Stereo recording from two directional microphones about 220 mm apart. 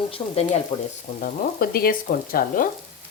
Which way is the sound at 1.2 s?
40° left (ahead or behind).